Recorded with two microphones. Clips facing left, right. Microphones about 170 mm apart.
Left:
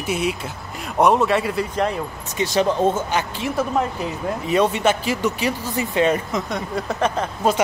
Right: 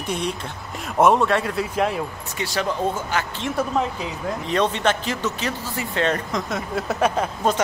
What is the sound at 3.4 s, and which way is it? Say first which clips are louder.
Speech: even; 5° left (ahead or behind).